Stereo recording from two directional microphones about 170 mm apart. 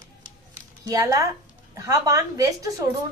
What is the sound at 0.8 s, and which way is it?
A woman's voice, 20° right (ahead or behind).